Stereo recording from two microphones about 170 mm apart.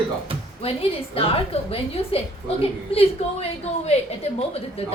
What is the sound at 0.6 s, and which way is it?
A woman's voice, 35° left (ahead or behind).